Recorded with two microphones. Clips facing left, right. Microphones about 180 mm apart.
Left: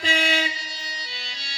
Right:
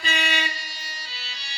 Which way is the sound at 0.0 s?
65° left (ahead or behind).